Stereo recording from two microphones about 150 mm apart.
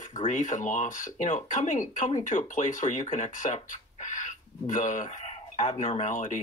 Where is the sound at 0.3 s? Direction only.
55° left (ahead or behind).